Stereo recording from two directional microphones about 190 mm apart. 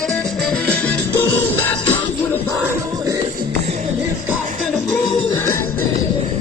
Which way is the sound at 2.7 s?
15° right (ahead or behind).